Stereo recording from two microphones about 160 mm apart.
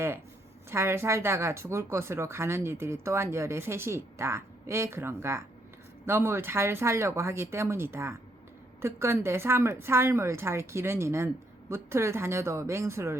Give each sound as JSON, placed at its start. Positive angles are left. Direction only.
{"t": 0.7, "sound": "speech", "side_deg": -15}